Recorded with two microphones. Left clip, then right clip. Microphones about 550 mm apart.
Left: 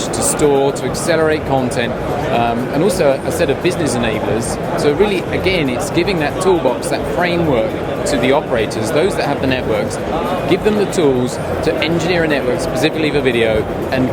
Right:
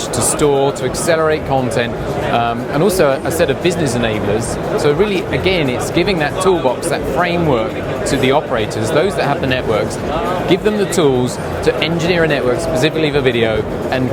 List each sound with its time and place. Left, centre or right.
0.4 s speech: right
8.1 s speech: right